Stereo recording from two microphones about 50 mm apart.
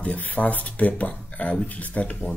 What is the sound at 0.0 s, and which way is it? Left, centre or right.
Speech, left.